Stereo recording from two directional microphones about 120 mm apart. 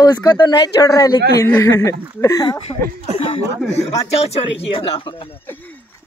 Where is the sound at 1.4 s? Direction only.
20° left (ahead or behind).